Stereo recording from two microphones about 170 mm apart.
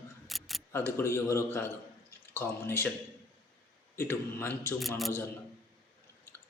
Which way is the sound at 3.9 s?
15° left (ahead or behind).